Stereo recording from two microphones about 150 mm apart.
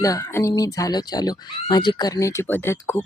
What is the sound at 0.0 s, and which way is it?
Speech, 20° left (ahead or behind).